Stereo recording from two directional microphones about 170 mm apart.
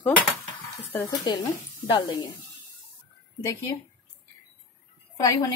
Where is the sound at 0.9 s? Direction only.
25° left (ahead or behind).